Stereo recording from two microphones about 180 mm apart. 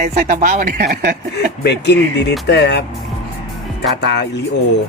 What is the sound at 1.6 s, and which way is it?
Speech, 65° left (ahead or behind).